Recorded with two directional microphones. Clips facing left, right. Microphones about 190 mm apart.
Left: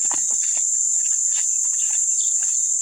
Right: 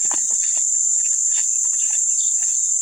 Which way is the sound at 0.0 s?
Centre (ahead or behind).